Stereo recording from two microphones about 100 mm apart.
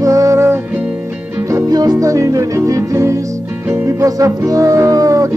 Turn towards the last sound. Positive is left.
turn(degrees=-35)  # may be behind; listen again after turning